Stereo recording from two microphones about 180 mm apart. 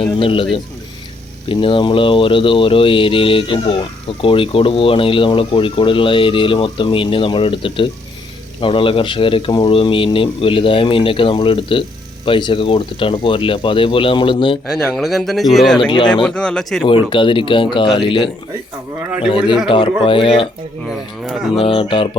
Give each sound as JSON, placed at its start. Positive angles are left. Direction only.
{"t": 0.2, "sound": "a man's voice", "side_deg": 30}
{"t": 1.5, "sound": "speech", "side_deg": 30}
{"t": 14.7, "sound": "speech", "side_deg": 0}
{"t": 17.1, "sound": "speech", "side_deg": 30}
{"t": 19.6, "sound": "speech", "side_deg": 30}
{"t": 20.9, "sound": "speech", "side_deg": 0}
{"t": 21.6, "sound": "speech", "side_deg": 30}